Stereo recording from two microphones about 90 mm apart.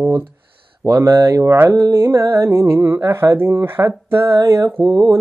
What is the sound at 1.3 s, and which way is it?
Mantra, 35° right (ahead or behind).